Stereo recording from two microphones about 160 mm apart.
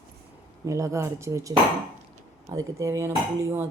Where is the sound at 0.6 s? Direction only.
20° right (ahead or behind).